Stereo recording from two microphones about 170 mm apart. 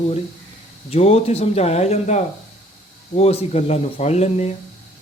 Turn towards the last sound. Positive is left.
turn(degrees=40)  # may be behind; listen again after turning